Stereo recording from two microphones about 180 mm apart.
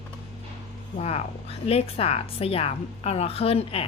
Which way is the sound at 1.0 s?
35° left (ahead or behind).